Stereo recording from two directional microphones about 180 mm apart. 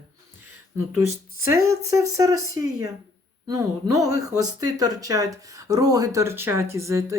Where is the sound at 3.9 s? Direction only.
20° right (ahead or behind).